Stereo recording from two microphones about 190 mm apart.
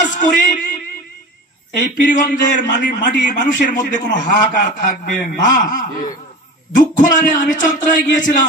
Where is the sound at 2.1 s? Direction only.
45° left (ahead or behind).